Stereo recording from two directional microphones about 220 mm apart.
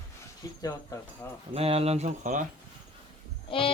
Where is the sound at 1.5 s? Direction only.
25° right (ahead or behind).